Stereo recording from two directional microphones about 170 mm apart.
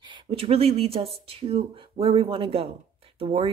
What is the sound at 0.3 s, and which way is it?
Speech, 35° right (ahead or behind).